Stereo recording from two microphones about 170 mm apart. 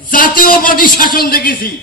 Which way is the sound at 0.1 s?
55° left (ahead or behind).